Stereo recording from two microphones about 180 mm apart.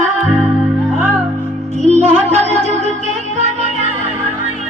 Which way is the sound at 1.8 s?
35° right (ahead or behind).